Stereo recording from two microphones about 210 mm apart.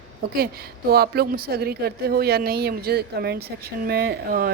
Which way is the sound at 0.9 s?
45° right (ahead or behind).